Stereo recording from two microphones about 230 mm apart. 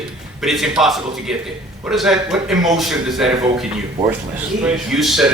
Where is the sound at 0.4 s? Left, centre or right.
Centre.